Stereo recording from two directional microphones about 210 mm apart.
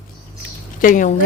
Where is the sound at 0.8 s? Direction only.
40° left (ahead or behind).